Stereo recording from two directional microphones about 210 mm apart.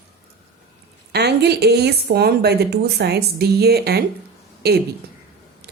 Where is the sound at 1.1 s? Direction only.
50° right (ahead or behind).